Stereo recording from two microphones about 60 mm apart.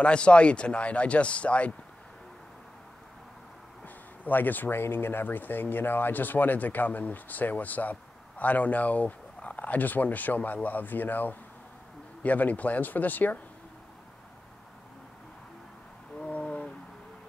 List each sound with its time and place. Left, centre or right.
0.0 s speech: centre
3.8 s speech: left
16.2 s a sound: left